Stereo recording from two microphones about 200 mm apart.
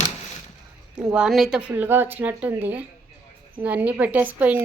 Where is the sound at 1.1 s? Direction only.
Centre (ahead or behind).